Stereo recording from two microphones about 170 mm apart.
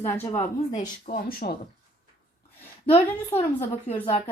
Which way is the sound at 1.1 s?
60° left (ahead or behind).